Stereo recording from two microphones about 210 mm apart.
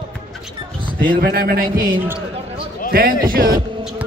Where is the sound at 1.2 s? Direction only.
45° right (ahead or behind).